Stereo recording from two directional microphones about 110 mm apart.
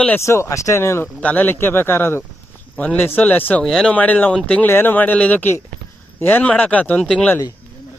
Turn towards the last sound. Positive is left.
turn(degrees=10)  # may be behind; listen again after turning